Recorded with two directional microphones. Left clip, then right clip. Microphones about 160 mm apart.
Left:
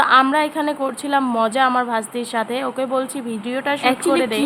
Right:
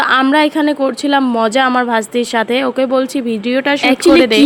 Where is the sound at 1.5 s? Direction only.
25° right (ahead or behind).